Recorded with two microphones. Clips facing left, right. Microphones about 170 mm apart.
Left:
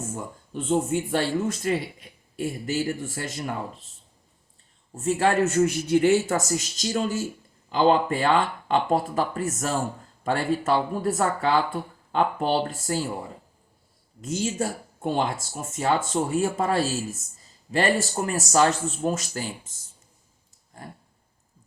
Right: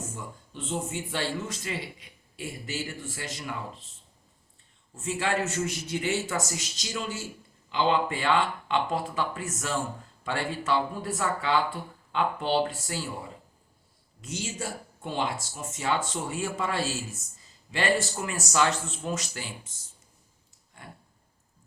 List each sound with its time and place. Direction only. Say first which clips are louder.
0.2 s a man's voice: left 6 dB; 50° left (ahead or behind)
4.9 s a man's voice: left 7 dB; 50° left (ahead or behind)
14.2 s a man's voice: left 8 dB; 45° left (ahead or behind)
20.7 s a sound: left 6 dB; 40° left (ahead or behind)